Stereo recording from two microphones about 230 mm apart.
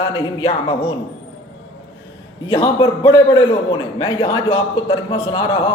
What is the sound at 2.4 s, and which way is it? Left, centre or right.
A man's voice, centre.